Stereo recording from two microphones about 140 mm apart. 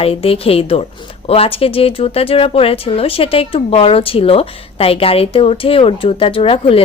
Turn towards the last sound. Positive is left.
turn(degrees=40)  # may be behind; listen again after turning